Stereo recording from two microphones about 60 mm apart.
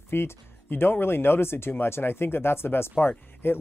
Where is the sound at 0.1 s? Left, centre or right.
Left.